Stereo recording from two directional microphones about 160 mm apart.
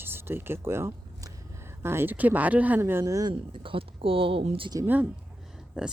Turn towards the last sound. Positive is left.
turn(degrees=-5)  # may be behind; listen again after turning